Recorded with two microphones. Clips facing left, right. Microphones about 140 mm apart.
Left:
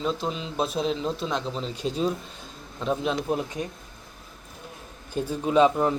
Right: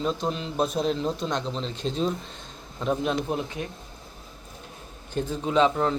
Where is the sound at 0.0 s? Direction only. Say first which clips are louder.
Right 1 dB; centre (ahead or behind).